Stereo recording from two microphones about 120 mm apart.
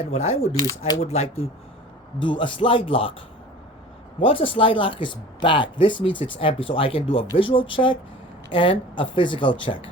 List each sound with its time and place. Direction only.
0.0 s speech: 65° left (ahead or behind)
2.2 s speech: 45° left (ahead or behind)
4.2 s speech: 50° left (ahead or behind)